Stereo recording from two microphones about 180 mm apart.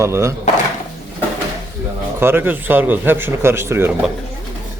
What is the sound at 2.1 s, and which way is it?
Speech, 10° right (ahead or behind).